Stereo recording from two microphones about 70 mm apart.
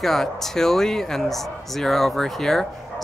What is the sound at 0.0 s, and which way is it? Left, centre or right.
Speech, centre.